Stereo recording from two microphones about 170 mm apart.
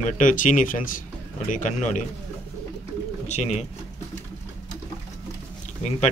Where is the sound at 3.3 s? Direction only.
40° left (ahead or behind).